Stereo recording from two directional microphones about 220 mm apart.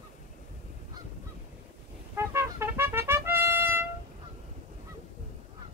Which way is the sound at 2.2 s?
10° right (ahead or behind).